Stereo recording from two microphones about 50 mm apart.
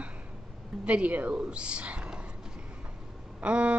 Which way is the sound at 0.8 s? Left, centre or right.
Right.